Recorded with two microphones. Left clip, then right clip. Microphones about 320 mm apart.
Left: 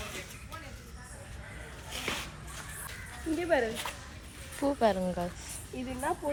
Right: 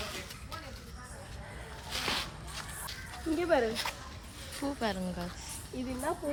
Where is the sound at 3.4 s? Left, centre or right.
Centre.